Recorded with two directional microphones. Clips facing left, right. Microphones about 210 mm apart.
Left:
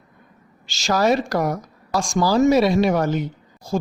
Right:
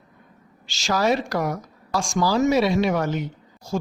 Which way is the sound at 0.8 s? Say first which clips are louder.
Left 3 dB; 40° left (ahead or behind).